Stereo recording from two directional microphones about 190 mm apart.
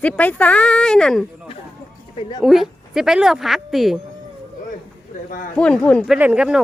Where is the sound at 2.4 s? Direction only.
Centre (ahead or behind).